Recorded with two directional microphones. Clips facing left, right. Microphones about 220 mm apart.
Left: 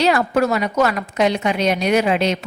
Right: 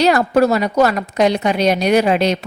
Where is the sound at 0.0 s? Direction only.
40° right (ahead or behind).